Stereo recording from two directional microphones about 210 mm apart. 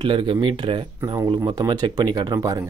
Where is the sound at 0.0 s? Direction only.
25° right (ahead or behind).